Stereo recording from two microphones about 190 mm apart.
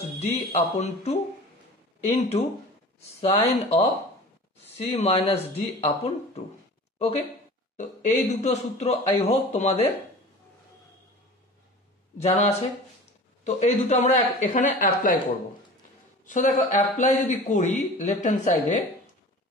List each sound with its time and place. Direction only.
0.2 s speech: 35° left (ahead or behind)
7.7 s speech: 40° left (ahead or behind)
12.2 s speech: 35° left (ahead or behind)
16.3 s speech: 40° left (ahead or behind)